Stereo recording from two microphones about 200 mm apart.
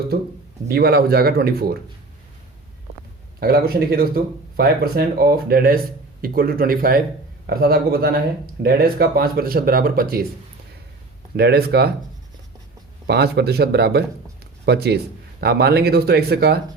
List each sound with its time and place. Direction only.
0.7 s speech: 50° right (ahead or behind)
3.4 s speech: 50° right (ahead or behind)
11.3 s speech: 55° right (ahead or behind)
13.1 s speech: 55° right (ahead or behind)